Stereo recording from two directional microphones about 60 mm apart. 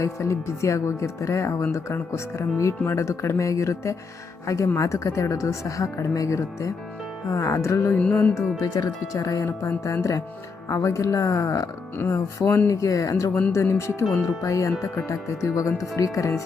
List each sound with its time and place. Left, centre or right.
0.0 s speech: left
7.9 s music: left
8.6 s speech: left
9.6 s speech: left
13.5 s speech: left
14.4 s speech: left